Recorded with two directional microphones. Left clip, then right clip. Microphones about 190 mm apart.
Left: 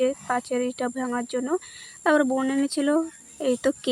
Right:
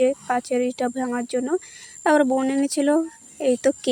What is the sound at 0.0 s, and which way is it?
Speech, 15° right (ahead or behind).